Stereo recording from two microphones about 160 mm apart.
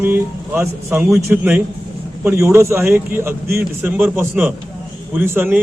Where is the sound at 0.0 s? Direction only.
15° right (ahead or behind).